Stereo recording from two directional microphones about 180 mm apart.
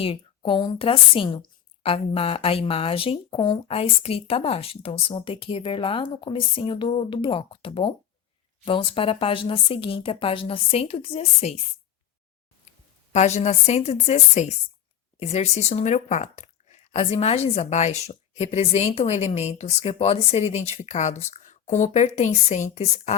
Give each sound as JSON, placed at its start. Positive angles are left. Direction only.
{"t": 0.0, "sound": "a woman's voice", "side_deg": 30}
{"t": 13.1, "sound": "a woman's voice", "side_deg": 40}